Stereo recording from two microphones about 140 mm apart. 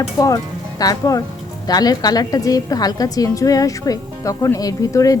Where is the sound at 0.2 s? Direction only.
25° left (ahead or behind).